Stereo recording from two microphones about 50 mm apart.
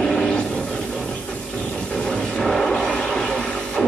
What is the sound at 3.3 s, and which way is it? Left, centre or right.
Printer, centre.